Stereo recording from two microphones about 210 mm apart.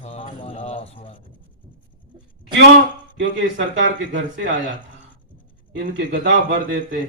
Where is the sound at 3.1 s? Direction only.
60° right (ahead or behind).